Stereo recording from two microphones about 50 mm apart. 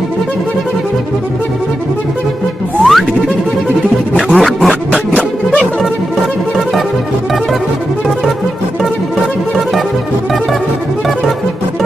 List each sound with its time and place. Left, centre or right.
2.8 s music: centre
4.4 s a sound: centre
4.9 s music: left